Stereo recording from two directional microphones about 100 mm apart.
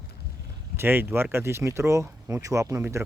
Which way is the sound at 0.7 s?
20° right (ahead or behind).